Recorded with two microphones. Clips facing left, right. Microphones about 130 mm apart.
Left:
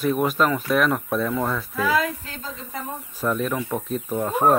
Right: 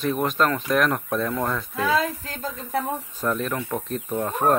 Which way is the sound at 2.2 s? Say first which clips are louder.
Right 4 dB; 40° right (ahead or behind).